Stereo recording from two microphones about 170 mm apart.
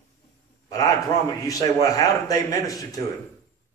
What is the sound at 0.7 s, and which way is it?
A man's voice, 20° left (ahead or behind).